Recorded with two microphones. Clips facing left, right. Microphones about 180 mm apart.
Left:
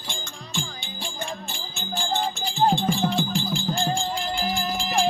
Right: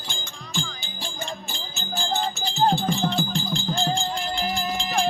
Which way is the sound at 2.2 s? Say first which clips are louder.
Even; 10° left (ahead or behind).